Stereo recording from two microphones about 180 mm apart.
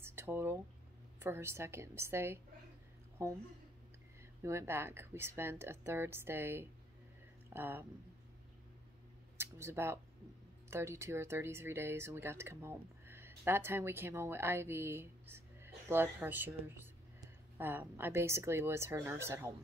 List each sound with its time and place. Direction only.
0.0 s a sound: 15° right (ahead or behind)
1.2 s a woman's voice: 15° right (ahead or behind)
4.4 s a woman's voice: 15° right (ahead or behind)
9.4 s speech: 15° right (ahead or behind)